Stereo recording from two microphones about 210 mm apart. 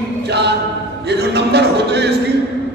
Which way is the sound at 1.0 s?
55° right (ahead or behind).